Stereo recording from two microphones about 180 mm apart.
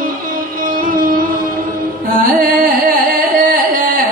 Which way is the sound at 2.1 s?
50° right (ahead or behind).